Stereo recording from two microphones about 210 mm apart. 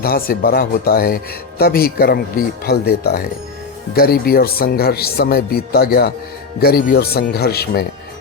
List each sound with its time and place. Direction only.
0.0 s speech: 45° left (ahead or behind)